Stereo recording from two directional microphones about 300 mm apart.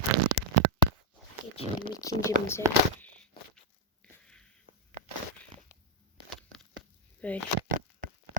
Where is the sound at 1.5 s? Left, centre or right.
Centre.